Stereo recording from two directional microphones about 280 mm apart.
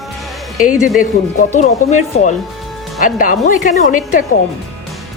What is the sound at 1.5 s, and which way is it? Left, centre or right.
A woman's voice, left.